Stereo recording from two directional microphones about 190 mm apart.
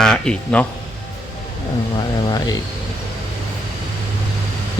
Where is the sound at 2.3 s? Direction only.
20° left (ahead or behind).